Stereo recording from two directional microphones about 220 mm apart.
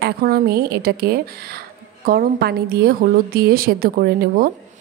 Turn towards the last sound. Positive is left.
turn(degrees=-40)  # may be behind; listen again after turning